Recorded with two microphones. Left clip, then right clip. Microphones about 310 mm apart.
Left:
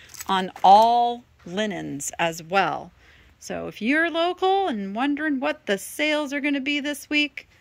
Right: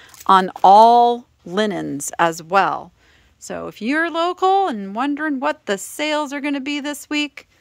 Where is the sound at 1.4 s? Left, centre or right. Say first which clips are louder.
Right 4 dB; centre.